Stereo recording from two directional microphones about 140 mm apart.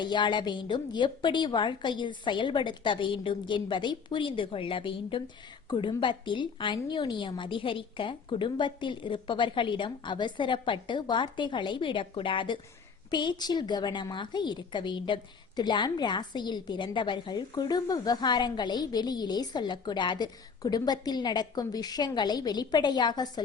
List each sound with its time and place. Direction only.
0.0 s a woman's voice: 35° left (ahead or behind)